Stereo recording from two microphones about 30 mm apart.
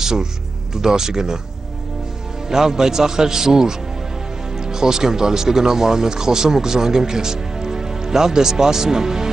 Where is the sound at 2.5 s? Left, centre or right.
Centre.